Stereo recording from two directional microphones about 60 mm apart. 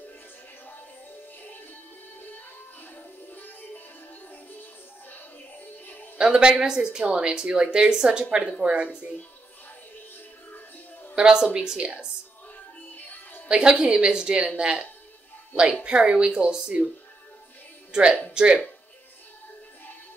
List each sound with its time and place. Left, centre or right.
3.3 s music: left
6.1 s a woman's voice: centre
11.1 s a woman's voice: centre
12.9 s music: left
13.5 s speech: centre
17.9 s speech: centre